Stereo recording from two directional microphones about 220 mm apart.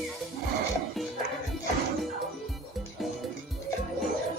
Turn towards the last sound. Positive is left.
turn(degrees=0)  # may be behind; listen again after turning